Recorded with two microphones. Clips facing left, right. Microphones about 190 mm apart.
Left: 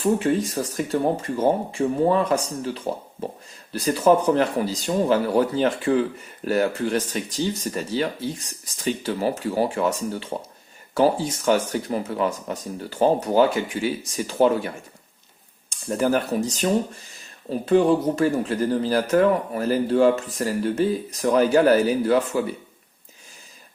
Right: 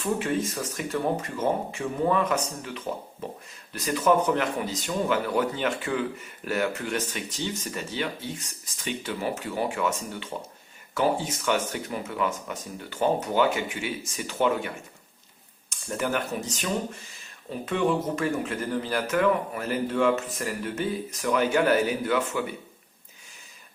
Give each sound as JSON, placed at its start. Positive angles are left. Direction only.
{"t": 0.0, "sound": "speech", "side_deg": 35}
{"t": 15.7, "sound": "speech", "side_deg": 35}